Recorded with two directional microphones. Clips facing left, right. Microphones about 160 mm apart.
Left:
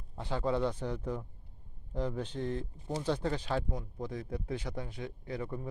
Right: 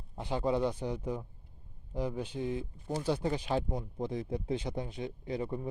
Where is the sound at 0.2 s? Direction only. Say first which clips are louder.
Right 1 dB; 15° right (ahead or behind).